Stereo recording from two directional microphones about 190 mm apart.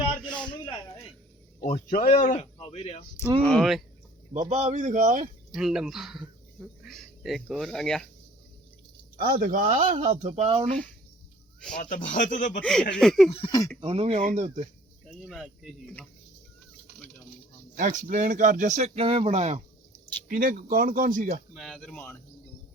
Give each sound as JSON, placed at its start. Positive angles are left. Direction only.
{"t": 0.1, "sound": "a sound", "side_deg": 5}
{"t": 1.6, "sound": "a man's voice", "side_deg": 45}
{"t": 3.4, "sound": "speech", "side_deg": 0}
{"t": 4.4, "sound": "speech", "side_deg": -40}
{"t": 5.5, "sound": "speech", "side_deg": -5}
{"t": 9.1, "sound": "speech", "side_deg": -50}
{"t": 11.7, "sound": "speech", "side_deg": 45}
{"t": 12.9, "sound": "speech", "side_deg": 0}
{"t": 13.3, "sound": "speech", "side_deg": 25}
{"t": 13.8, "sound": "speech", "side_deg": -30}
{"t": 15.2, "sound": "speech", "side_deg": 0}
{"t": 17.7, "sound": "speech", "side_deg": -45}
{"t": 20.2, "sound": "speech", "side_deg": -50}
{"t": 21.5, "sound": "speech", "side_deg": 0}